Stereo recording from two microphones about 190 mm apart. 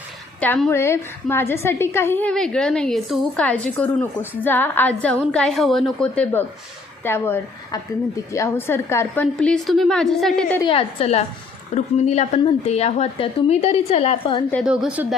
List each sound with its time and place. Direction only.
0.3 s a woman's voice: 5° left (ahead or behind)
10.6 s speech: 30° left (ahead or behind)
14.5 s a woman's voice: centre (ahead or behind)